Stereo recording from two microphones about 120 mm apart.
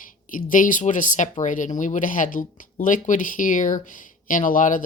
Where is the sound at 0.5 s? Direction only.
90° left.